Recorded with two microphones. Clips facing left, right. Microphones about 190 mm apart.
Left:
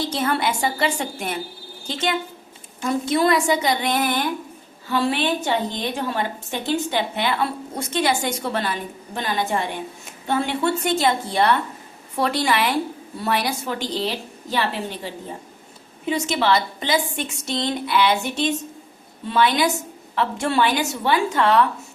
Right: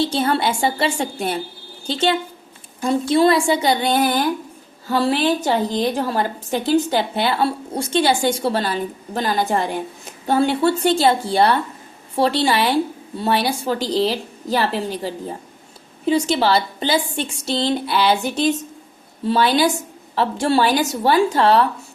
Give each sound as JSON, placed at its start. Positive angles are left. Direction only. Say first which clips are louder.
{"t": 0.0, "sound": "a woman's voice", "louder": "right 4 dB", "side_deg": -30}